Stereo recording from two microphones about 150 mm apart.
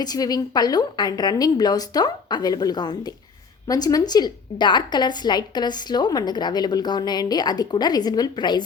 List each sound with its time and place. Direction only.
0.0 s a woman's voice: 25° left (ahead or behind)